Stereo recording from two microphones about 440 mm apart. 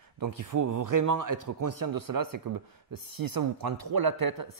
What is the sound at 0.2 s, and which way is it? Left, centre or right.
Speech, right.